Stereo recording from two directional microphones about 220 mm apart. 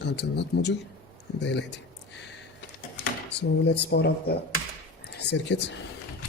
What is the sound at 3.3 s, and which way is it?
Speech, 50° left (ahead or behind).